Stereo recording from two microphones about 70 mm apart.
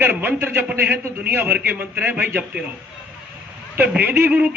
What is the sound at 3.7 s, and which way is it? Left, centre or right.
Speech, right.